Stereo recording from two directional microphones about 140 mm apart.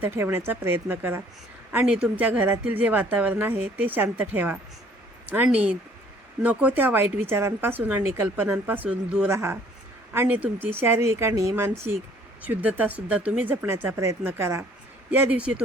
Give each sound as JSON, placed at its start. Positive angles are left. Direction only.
{"t": 0.0, "sound": "a woman's voice", "side_deg": -15}